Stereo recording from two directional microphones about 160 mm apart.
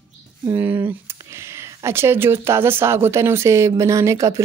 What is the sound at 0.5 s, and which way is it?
Speech, 15° right (ahead or behind).